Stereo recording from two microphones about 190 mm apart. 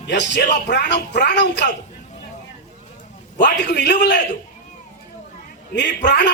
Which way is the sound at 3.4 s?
65° left (ahead or behind).